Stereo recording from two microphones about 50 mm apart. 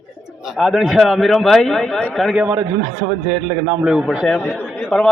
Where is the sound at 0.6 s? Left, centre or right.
Centre.